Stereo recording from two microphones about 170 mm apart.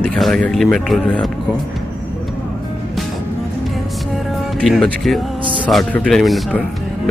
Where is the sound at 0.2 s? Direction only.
5° left (ahead or behind).